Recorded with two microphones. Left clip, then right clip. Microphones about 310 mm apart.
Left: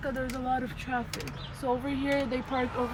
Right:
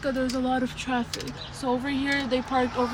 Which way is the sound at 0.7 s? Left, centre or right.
Centre.